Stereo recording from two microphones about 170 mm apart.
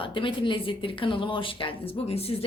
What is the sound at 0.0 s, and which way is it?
A woman's voice, 30° left (ahead or behind).